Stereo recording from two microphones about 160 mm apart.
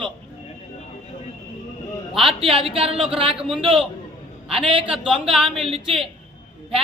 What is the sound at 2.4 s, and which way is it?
Speech, 35° right (ahead or behind).